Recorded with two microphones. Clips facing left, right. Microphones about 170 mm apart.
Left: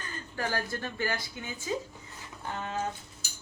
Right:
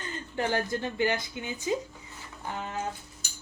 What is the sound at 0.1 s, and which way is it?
Speech, 20° right (ahead or behind).